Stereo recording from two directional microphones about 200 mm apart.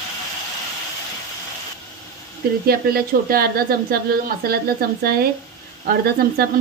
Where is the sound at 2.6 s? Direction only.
50° right (ahead or behind).